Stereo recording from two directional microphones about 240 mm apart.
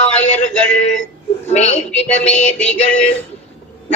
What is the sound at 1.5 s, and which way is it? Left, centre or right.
Speech, left.